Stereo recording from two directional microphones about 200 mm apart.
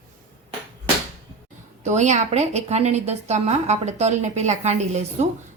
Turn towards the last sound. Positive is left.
turn(degrees=-35)  # may be behind; listen again after turning